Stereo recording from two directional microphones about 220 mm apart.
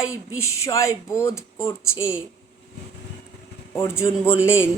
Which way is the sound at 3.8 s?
10° left (ahead or behind).